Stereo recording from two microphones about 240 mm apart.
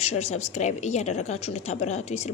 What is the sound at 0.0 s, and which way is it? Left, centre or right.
A woman's voice, left.